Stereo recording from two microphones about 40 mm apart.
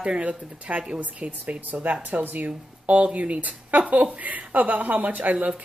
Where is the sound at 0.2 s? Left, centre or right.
Right.